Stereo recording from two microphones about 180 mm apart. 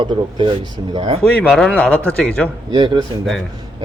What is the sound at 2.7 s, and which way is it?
Speech, 25° right (ahead or behind).